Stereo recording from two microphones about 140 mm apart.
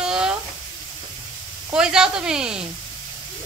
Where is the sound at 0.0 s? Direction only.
5° right (ahead or behind).